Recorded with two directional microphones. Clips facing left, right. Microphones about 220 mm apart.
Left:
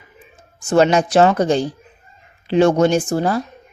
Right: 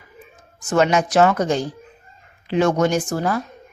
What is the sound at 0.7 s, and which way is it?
A woman's voice, 30° left (ahead or behind).